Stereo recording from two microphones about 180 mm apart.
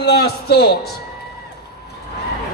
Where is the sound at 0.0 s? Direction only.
65° left (ahead or behind).